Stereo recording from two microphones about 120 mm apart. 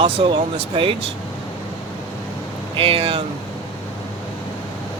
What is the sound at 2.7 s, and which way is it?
Speech, 50° right (ahead or behind).